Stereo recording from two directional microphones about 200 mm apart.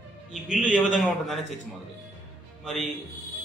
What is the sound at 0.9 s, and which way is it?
Speech, centre (ahead or behind).